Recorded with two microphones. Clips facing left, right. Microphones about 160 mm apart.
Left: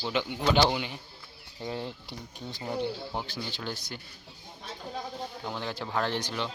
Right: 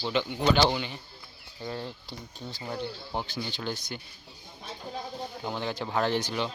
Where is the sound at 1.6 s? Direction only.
20° left (ahead or behind).